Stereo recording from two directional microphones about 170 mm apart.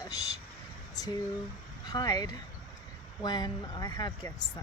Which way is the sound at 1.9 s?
25° left (ahead or behind).